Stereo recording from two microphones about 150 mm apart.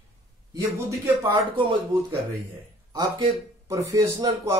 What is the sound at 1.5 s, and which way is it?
Speech, 35° right (ahead or behind).